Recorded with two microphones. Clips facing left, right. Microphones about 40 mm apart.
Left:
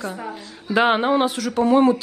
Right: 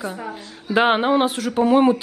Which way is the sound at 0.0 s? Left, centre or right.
Centre.